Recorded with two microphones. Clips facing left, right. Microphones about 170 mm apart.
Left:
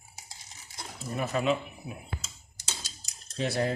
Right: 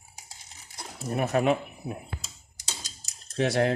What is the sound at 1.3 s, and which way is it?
Speech, 60° right (ahead or behind).